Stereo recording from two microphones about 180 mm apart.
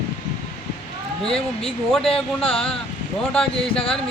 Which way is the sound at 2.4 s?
30° left (ahead or behind).